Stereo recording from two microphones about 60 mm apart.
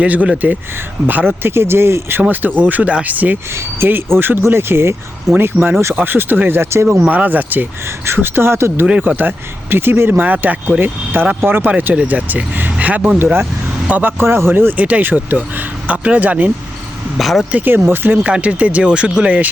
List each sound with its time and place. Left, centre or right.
0.0 s speech: right
1.4 s speech: right
2.6 s speech: right
3.5 s speech: right
7.1 s speech: right
7.9 s speech: right
8.9 s speech: right
14.2 s speech: right
17.2 s speech: centre
17.5 s speech: right
18.2 s speech: centre